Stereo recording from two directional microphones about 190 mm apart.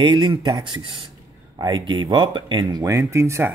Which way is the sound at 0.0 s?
25° right (ahead or behind).